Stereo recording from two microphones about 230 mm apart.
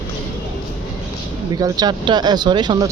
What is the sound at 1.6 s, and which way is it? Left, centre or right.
Speech, centre.